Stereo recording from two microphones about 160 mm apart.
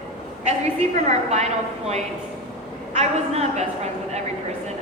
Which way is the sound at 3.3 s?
40° right (ahead or behind).